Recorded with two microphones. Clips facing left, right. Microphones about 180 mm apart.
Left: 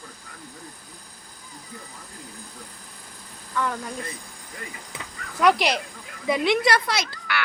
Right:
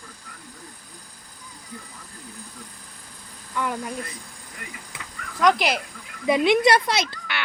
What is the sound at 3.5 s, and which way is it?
Speech, 15° right (ahead or behind).